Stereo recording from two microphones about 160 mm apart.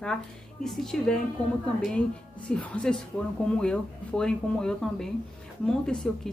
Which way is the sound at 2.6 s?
5° left (ahead or behind).